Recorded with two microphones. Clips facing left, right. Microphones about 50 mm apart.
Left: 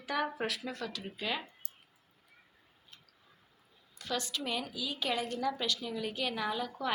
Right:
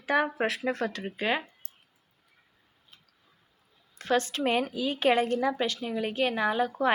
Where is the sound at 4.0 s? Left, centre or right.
Right.